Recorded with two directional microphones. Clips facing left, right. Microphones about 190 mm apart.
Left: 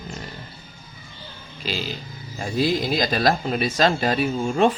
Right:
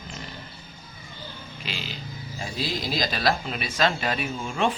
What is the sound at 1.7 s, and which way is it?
Speech, 35° left (ahead or behind).